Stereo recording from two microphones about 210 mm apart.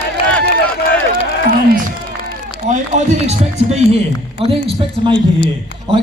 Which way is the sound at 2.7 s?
35° right (ahead or behind).